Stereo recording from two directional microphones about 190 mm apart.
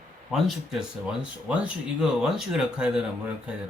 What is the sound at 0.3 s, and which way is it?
Speech, centre (ahead or behind).